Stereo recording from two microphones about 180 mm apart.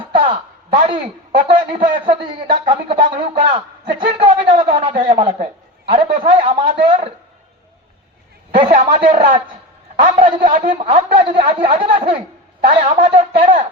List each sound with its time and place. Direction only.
0.0 s a man's voice: 30° right (ahead or behind)
8.5 s speech: 30° right (ahead or behind)